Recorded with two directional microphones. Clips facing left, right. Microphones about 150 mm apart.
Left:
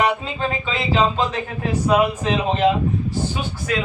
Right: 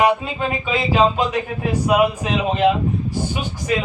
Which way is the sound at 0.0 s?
10° right (ahead or behind).